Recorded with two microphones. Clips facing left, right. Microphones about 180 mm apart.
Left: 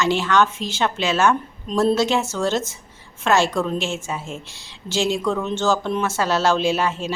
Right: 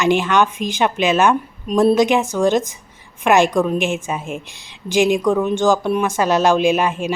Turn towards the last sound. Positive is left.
turn(degrees=-15)  # may be behind; listen again after turning